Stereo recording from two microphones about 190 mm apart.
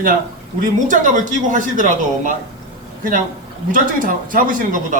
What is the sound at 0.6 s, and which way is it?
Speech, 40° right (ahead or behind).